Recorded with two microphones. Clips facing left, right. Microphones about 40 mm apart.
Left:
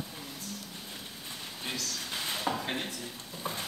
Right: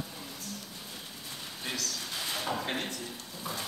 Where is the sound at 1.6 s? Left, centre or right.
Centre.